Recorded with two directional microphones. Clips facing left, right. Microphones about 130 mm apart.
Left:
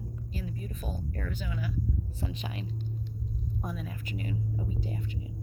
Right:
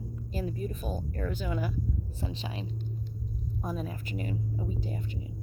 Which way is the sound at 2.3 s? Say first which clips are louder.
Right 1 dB; 30° right (ahead or behind).